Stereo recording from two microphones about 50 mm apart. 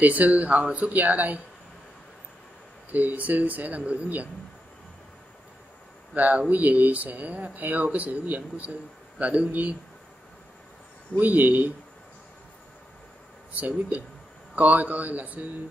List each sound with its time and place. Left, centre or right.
0.0 s speech: right
2.9 s speech: right
6.1 s a man's voice: right
11.1 s speech: right
13.5 s speech: right